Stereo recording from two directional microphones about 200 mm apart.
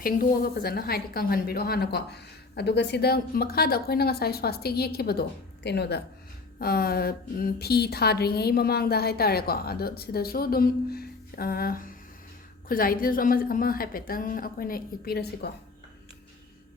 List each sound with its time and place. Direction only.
0.0 s a woman's voice: 45° left (ahead or behind)